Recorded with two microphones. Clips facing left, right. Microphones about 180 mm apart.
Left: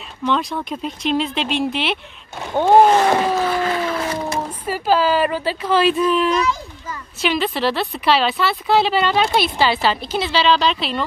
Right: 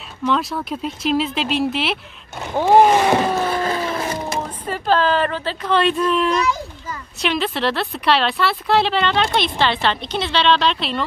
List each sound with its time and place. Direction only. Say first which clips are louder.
0.2 s a woman's voice: even; centre (ahead or behind)
3.4 s a sound: left 1 dB; 40° right (ahead or behind)
4.6 s a woman's voice: left 1 dB; 5° left (ahead or behind)